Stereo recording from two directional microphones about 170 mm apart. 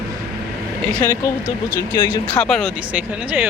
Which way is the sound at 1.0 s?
15° left (ahead or behind).